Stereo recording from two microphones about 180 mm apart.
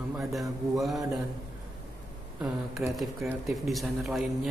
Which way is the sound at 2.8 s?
5° right (ahead or behind).